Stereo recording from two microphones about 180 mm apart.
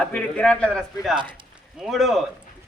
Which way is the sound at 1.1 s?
25° right (ahead or behind).